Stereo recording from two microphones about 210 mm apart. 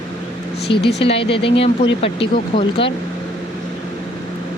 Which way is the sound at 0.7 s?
25° left (ahead or behind).